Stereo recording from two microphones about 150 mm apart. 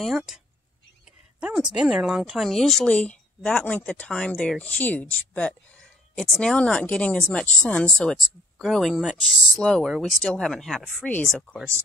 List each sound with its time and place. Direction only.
0.0 s speech: centre (ahead or behind)
1.4 s speech: 5° right (ahead or behind)